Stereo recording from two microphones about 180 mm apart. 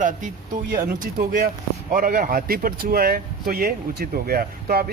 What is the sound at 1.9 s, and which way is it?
Speech, 50° right (ahead or behind).